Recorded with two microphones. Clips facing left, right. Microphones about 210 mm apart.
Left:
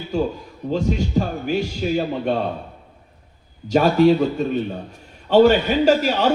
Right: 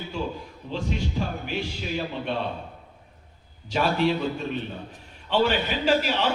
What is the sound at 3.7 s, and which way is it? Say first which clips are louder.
Speech: left 9 dB; 40° left (ahead or behind).